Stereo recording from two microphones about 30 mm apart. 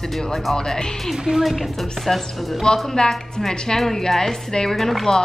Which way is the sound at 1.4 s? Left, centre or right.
Centre.